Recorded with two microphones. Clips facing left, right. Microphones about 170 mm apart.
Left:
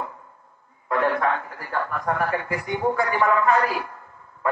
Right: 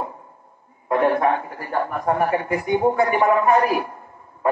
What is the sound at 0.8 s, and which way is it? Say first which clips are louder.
A man's voice: right 4 dB; 20° right (ahead or behind).